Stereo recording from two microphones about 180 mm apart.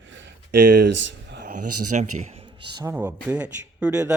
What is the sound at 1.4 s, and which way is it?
Speech, 50° right (ahead or behind).